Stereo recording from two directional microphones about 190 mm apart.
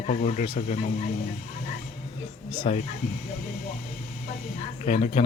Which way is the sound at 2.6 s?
35° left (ahead or behind).